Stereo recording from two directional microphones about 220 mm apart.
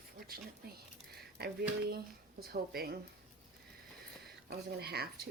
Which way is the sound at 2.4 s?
45° right (ahead or behind).